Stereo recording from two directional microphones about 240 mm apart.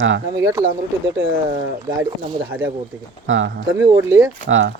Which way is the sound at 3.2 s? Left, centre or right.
Right.